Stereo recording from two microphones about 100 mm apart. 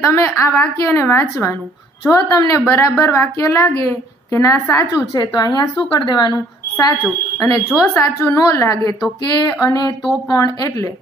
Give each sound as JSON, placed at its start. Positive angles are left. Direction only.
{"t": 0.0, "sound": "a woman's voice", "side_deg": 25}
{"t": 4.9, "sound": "a woman's voice", "side_deg": 40}